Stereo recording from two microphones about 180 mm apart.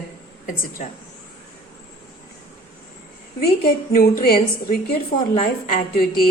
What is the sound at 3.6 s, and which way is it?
A woman's voice, 55° left (ahead or behind).